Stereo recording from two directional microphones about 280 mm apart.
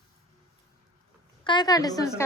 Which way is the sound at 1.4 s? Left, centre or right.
Centre.